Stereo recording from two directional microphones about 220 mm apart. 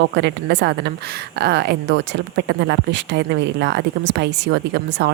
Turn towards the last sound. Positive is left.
turn(degrees=-50)  # may be behind; listen again after turning